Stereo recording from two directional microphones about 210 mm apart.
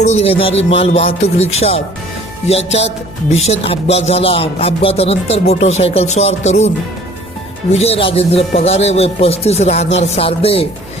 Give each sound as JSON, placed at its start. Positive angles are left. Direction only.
{"t": 0.0, "sound": "speech", "side_deg": 30}
{"t": 3.3, "sound": "speech", "side_deg": 30}
{"t": 7.7, "sound": "speech", "side_deg": 30}